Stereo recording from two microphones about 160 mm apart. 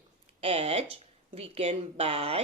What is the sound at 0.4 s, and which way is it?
Speech, 40° right (ahead or behind).